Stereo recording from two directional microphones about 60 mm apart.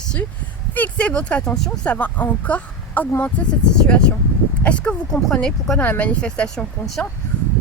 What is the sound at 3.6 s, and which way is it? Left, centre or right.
Speech, centre.